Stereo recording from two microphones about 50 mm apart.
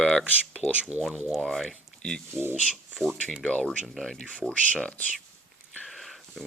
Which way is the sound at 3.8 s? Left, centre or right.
Centre.